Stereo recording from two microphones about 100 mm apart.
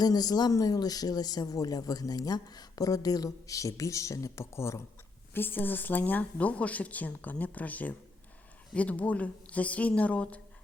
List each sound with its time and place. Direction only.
0.0 s speech: 40° left (ahead or behind); by 10.4 s 15° left (ahead or behind)